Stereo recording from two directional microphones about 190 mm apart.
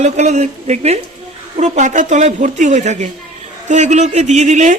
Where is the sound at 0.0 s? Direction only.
35° right (ahead or behind).